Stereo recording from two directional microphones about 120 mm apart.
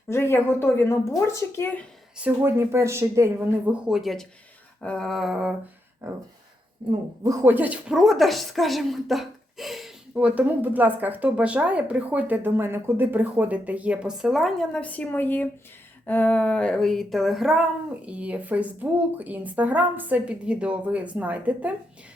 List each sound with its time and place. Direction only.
0.1 s a woman's voice: 20° left (ahead or behind)
2.1 s a woman's voice: 15° right (ahead or behind)
3.7 s a sound: 5° right (ahead or behind)
6.0 s a woman's voice: 25° right (ahead or behind)